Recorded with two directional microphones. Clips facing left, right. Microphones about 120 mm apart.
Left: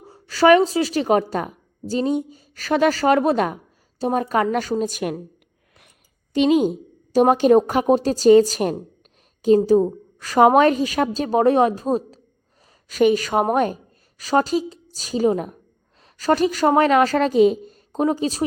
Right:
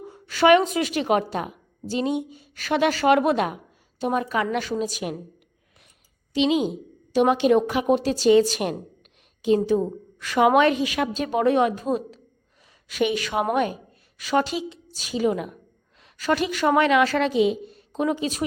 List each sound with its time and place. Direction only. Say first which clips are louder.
0.0 s a woman's voice: left 3 dB; 35° left (ahead or behind)
6.3 s a woman's voice: left 4 dB; 45° left (ahead or behind)